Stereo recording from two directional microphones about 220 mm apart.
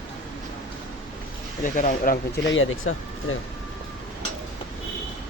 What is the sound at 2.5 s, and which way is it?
Speech, 65° left (ahead or behind).